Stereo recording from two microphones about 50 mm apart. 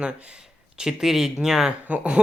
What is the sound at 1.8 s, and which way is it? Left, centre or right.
Speech, right.